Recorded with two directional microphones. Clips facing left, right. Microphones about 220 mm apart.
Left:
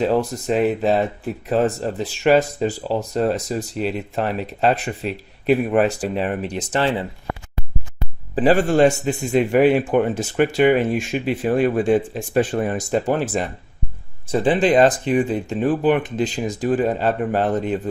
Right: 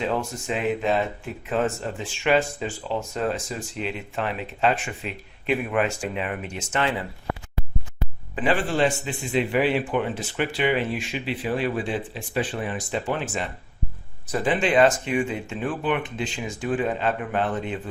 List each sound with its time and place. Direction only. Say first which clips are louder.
0.0 s speech: left 7 dB; 35° left (ahead or behind)
8.4 s a man's voice: left 8 dB; 40° left (ahead or behind)